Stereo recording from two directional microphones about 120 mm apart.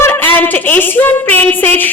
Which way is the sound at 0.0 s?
15° left (ahead or behind).